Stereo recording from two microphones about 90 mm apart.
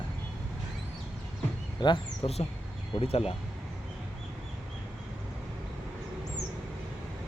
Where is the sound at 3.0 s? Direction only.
90° left.